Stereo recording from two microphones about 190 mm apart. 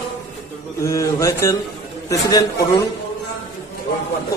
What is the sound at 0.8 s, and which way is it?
Speech, 15° left (ahead or behind).